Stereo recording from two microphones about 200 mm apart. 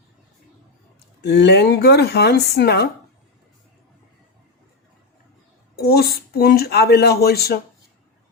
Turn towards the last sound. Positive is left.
turn(degrees=50)  # may be behind; listen again after turning